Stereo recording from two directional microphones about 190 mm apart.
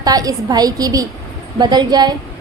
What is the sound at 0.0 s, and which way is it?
A woman's voice, 20° right (ahead or behind).